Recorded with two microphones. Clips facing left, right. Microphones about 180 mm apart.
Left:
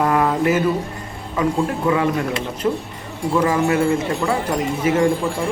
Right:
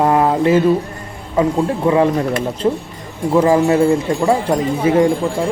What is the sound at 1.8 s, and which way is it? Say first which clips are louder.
Speech: right 6 dB; 30° right (ahead or behind).